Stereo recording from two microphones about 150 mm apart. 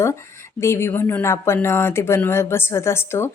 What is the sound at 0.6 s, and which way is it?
A woman's voice, 20° left (ahead or behind).